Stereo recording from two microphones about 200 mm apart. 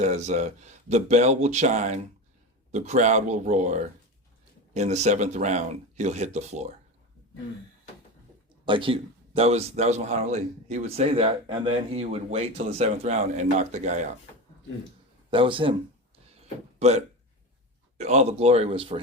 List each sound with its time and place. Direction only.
0.0 s speech: 35° right (ahead or behind)
8.6 s speech: 25° right (ahead or behind)
15.3 s speech: 25° right (ahead or behind)
17.9 s speech: 35° right (ahead or behind)